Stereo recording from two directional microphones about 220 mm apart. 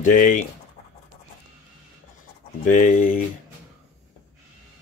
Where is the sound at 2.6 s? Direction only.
35° left (ahead or behind).